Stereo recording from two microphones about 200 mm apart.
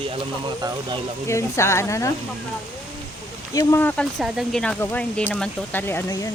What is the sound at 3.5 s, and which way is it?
Speech, 15° left (ahead or behind).